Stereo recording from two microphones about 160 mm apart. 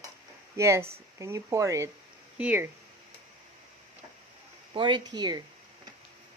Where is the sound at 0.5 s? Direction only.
15° right (ahead or behind).